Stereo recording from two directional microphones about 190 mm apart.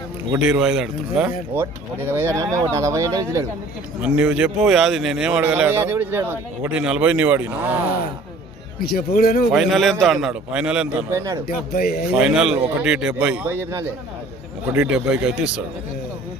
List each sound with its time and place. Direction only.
0.3 s a man's voice: 5° right (ahead or behind)
4.0 s a man's voice: 5° right (ahead or behind)
8.8 s speech: 55° left (ahead or behind)
9.5 s a man's voice: centre (ahead or behind)
11.1 s a man's voice: 15° right (ahead or behind)
11.4 s speech: 50° left (ahead or behind)
12.1 s a man's voice: 5° right (ahead or behind)